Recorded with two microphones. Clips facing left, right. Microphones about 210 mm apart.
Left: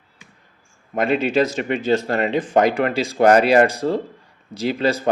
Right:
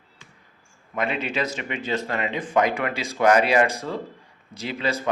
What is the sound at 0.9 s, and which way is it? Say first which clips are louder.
A man's voice: left 8 dB; 45° left (ahead or behind).